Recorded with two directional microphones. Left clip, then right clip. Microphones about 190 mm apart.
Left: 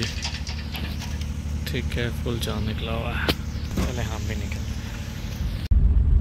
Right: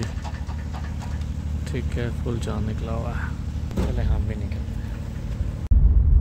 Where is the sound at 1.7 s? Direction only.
5° right (ahead or behind).